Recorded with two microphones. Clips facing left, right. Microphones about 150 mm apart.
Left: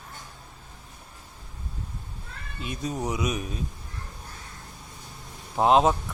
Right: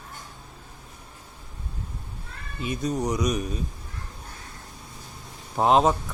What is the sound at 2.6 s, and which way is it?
Speech, centre (ahead or behind).